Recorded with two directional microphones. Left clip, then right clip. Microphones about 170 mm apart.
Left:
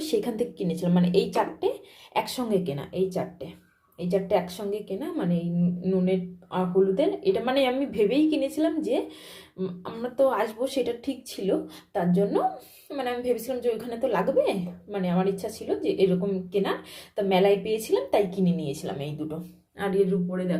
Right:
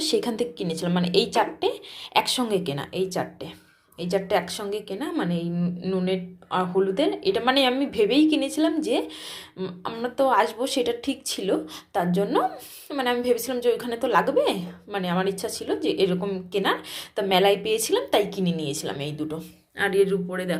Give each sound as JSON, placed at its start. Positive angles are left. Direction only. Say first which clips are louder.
{"t": 0.0, "sound": "a woman's voice", "louder": "right 2 dB", "side_deg": 10}